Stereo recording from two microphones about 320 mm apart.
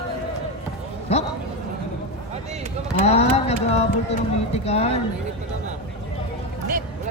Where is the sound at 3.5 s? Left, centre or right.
Centre.